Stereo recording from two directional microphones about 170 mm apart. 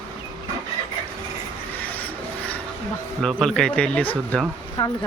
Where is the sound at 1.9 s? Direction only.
10° left (ahead or behind).